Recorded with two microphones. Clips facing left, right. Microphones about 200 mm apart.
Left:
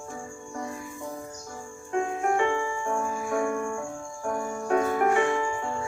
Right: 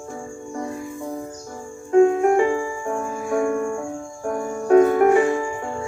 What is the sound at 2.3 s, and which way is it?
Music, 40° right (ahead or behind).